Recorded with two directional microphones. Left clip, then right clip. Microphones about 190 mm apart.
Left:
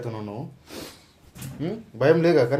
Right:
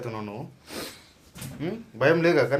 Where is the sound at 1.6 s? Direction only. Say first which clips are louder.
Left 2 dB; 25° left (ahead or behind).